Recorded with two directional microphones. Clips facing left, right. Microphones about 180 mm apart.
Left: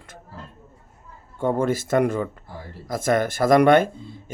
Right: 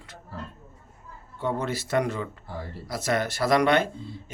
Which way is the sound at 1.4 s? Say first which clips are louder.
Left 7 dB; 50° left (ahead or behind).